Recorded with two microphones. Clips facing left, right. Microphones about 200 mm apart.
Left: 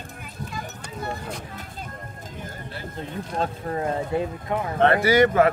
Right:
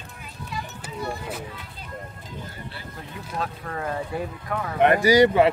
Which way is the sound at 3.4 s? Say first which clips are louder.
Left 5 dB; 25° left (ahead or behind).